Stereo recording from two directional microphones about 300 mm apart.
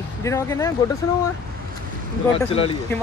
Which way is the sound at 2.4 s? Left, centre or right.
Centre.